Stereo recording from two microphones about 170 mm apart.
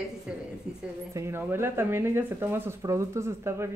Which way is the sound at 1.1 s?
15° right (ahead or behind).